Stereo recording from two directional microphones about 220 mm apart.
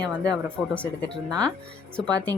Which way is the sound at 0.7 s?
5° left (ahead or behind).